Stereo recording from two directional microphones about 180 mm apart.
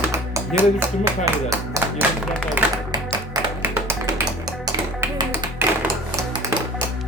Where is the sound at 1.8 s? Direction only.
15° right (ahead or behind).